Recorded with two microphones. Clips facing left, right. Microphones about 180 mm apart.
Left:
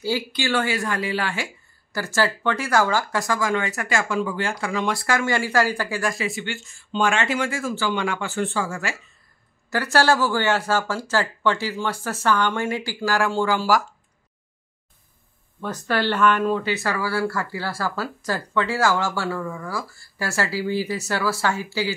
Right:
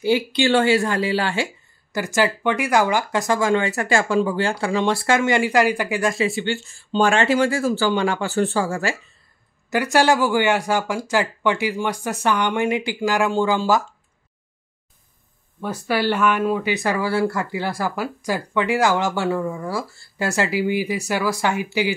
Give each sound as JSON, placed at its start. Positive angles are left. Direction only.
{"t": 0.0, "sound": "speech", "side_deg": -20}
{"t": 9.7, "sound": "speech", "side_deg": -15}
{"t": 15.6, "sound": "speech", "side_deg": -10}